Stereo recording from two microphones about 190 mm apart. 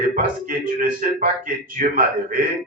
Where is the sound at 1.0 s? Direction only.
45° right (ahead or behind).